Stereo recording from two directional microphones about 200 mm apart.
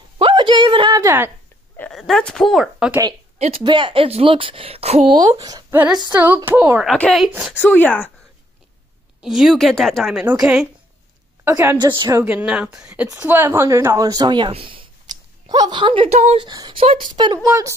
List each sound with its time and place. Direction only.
0.2 s a sound: 25° right (ahead or behind)
1.8 s speech: centre (ahead or behind)
3.3 s a woman's voice: 30° right (ahead or behind); by 6.9 s 10° right (ahead or behind)
6.9 s a woman's voice: centre (ahead or behind)
7.6 s speech: 5° left (ahead or behind)
9.2 s a woman's voice: centre (ahead or behind); by 16.4 s 35° right (ahead or behind)
16.4 s speech: 20° right (ahead or behind)